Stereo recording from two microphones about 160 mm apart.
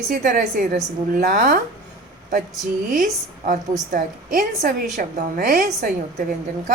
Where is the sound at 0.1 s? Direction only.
55° right (ahead or behind).